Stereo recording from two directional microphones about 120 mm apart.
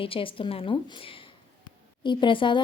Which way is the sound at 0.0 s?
50° left (ahead or behind).